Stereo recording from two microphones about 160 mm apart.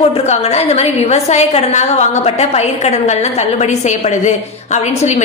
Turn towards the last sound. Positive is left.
turn(degrees=45)  # may be behind; listen again after turning